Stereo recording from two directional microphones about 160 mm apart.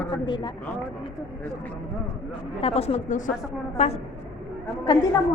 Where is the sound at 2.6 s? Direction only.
40° left (ahead or behind).